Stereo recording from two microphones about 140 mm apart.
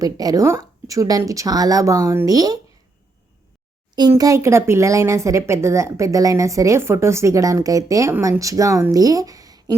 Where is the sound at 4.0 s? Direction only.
25° right (ahead or behind).